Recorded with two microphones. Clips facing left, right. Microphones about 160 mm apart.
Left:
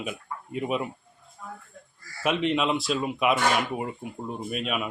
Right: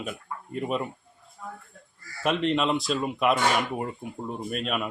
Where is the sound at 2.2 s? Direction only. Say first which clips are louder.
Even; 5° left (ahead or behind).